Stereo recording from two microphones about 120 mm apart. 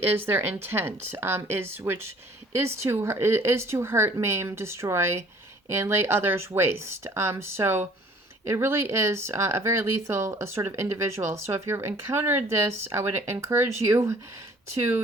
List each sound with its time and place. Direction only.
0.1 s speech: 15° right (ahead or behind)